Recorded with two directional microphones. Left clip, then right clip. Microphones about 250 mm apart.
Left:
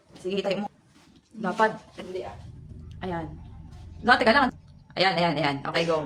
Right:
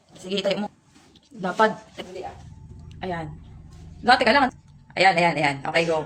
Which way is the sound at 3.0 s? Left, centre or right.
Centre.